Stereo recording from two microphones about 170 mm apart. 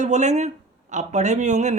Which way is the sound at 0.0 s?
45° right (ahead or behind).